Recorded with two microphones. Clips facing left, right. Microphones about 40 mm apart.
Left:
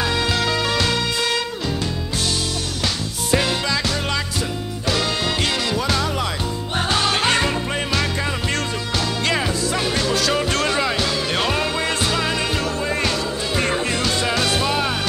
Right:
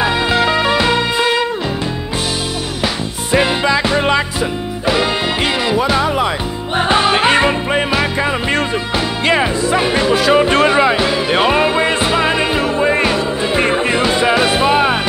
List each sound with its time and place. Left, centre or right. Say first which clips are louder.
0.0 s music: right 7 dB; right
3.3 s music: right 8 dB; right
5.7 s music: right 7 dB; right